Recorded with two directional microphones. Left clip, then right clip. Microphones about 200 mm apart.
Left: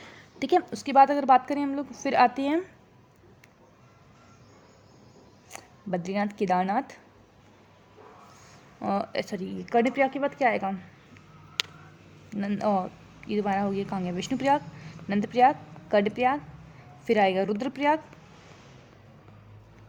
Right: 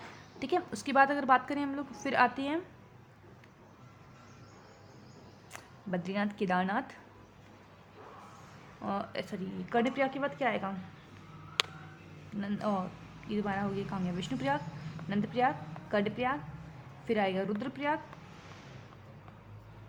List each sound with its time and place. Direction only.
0.3 s a woman's voice: 35° left (ahead or behind)
0.7 s a woman's voice: 20° left (ahead or behind)
5.5 s speech: 25° left (ahead or behind)
8.8 s speech: 35° left (ahead or behind)
12.4 s speech: 40° left (ahead or behind)